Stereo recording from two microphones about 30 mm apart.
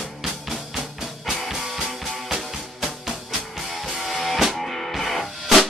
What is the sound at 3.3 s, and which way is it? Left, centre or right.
Music, centre.